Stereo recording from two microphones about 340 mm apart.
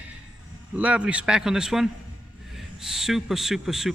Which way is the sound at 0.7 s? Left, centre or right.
Centre.